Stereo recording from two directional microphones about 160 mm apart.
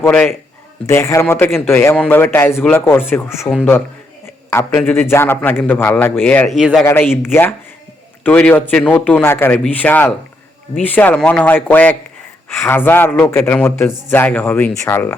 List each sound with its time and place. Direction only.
0.0 s speech: 10° left (ahead or behind)
6.5 s a man's voice: centre (ahead or behind)
6.8 s speech: 15° left (ahead or behind)